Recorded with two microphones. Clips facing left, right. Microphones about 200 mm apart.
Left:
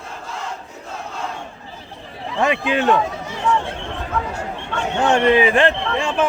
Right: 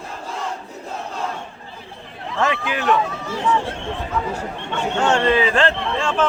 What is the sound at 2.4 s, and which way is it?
Speech, 25° left (ahead or behind).